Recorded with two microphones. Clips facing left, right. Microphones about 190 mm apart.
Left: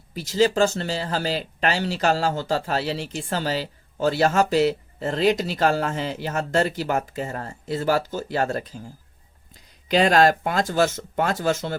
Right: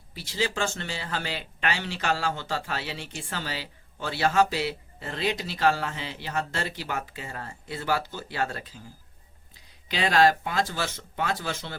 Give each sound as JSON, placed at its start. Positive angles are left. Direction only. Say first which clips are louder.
{"t": 0.1, "sound": "speech", "louder": "left 10 dB", "side_deg": 45}
{"t": 9.9, "sound": "speech", "louder": "left 5 dB", "side_deg": 45}